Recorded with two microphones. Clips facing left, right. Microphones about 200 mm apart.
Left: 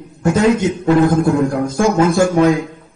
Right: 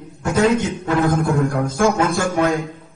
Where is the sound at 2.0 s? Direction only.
15° left (ahead or behind).